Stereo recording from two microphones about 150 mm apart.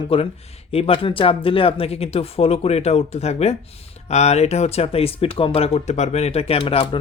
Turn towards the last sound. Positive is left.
turn(degrees=35)  # may be behind; listen again after turning